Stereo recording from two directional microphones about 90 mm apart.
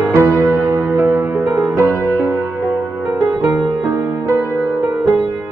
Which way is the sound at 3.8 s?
30° right (ahead or behind).